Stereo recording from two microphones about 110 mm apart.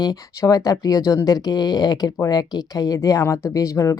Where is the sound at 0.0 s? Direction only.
35° left (ahead or behind).